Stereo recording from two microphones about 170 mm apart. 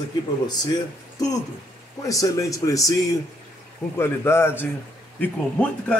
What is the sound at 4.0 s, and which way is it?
A man's voice, 15° left (ahead or behind).